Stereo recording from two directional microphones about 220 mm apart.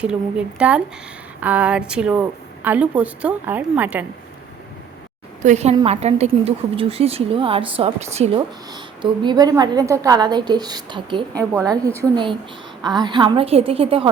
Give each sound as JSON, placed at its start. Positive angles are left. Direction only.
{"t": 0.0, "sound": "a woman's voice", "side_deg": -5}
{"t": 5.4, "sound": "a woman's voice", "side_deg": -30}